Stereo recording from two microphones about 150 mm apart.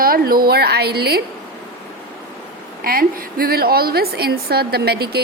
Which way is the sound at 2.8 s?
75° right (ahead or behind).